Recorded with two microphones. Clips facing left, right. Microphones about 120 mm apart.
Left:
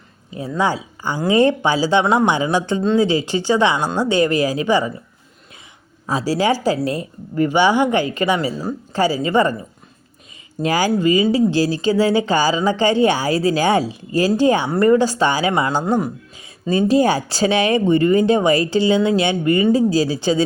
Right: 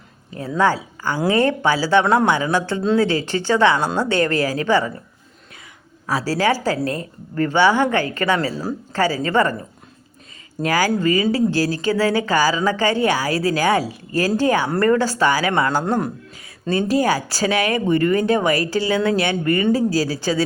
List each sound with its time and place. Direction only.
0.3 s speech: 15° left (ahead or behind)
6.1 s speech: 20° left (ahead or behind)
10.6 s speech: 20° left (ahead or behind)
15.8 s speech: 5° left (ahead or behind)
16.7 s speech: 25° left (ahead or behind)